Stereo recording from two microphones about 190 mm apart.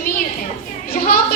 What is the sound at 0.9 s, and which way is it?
Speech, 50° left (ahead or behind).